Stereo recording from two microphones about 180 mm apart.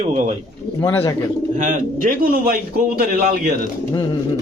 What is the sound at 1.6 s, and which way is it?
Speech, 50° right (ahead or behind).